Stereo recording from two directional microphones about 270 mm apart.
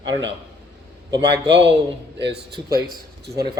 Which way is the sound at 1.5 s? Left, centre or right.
Right.